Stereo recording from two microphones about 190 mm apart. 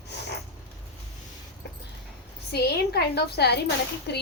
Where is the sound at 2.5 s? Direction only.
55° left (ahead or behind).